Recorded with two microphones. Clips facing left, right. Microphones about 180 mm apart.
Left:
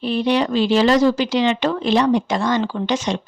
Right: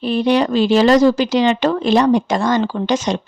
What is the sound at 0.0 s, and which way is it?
Speech, 45° right (ahead or behind).